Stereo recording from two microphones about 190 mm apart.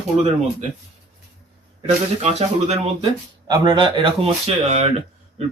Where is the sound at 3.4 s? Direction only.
20° right (ahead or behind).